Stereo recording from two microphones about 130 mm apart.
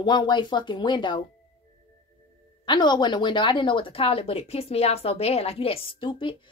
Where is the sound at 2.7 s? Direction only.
35° left (ahead or behind).